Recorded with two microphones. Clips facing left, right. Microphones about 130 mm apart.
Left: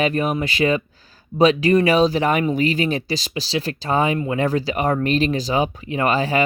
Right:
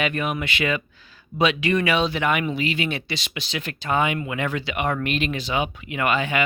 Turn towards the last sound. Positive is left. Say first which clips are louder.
# left 4 dB
turn(degrees=35)  # may be behind; listen again after turning